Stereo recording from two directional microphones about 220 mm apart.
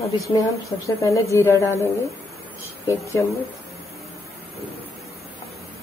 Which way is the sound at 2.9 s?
15° left (ahead or behind).